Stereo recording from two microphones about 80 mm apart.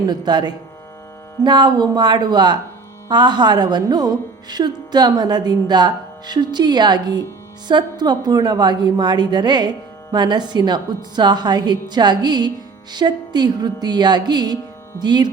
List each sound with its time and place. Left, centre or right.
0.1 s a woman's voice: right